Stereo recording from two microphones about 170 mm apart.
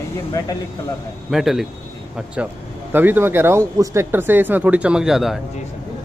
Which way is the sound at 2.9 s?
10° right (ahead or behind).